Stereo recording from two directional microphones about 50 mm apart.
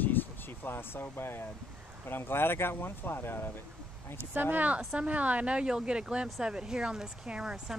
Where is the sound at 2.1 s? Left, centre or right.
Left.